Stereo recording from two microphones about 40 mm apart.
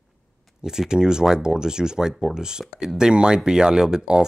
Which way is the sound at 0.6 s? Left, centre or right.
Centre.